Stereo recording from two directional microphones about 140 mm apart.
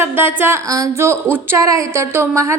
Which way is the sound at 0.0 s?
15° right (ahead or behind).